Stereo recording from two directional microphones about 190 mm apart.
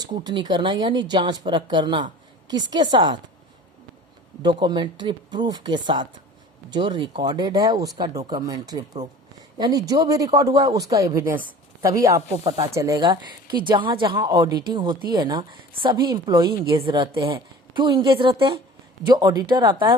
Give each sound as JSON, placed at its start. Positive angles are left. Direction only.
{"t": 0.0, "sound": "speech", "side_deg": -20}
{"t": 4.4, "sound": "speech", "side_deg": -25}